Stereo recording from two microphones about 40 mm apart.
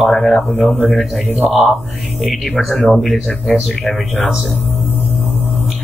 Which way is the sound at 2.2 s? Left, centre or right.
Centre.